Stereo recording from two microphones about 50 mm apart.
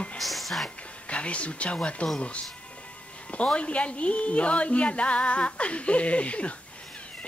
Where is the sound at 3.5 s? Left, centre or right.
Left.